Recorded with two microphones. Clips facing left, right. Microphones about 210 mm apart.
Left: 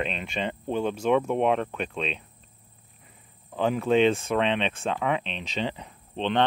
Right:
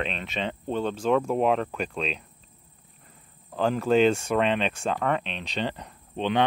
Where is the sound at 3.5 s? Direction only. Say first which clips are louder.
Even; centre (ahead or behind).